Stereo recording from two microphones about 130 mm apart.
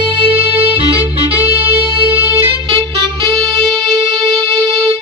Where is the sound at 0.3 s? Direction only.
45° right (ahead or behind).